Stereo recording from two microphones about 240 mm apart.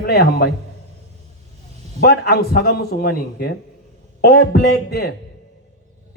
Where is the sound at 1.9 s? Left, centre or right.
Left.